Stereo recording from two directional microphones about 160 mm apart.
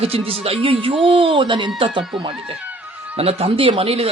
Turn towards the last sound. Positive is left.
turn(degrees=-35)  # may be behind; listen again after turning